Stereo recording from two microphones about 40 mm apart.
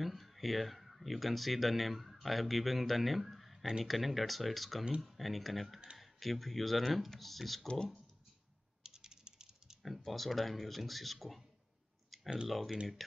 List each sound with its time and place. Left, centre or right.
0.0 s speech: centre
8.8 s typing: centre
9.8 s speech: centre
12.4 s speech: centre